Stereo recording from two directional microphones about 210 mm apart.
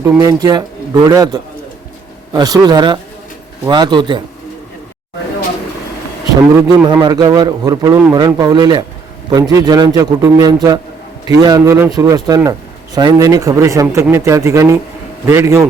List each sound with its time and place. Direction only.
0.2 s a man's voice: 15° right (ahead or behind)
6.6 s a man's voice: 15° right (ahead or behind)